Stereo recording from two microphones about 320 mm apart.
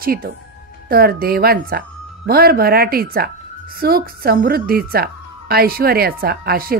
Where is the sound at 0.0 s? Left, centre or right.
Right.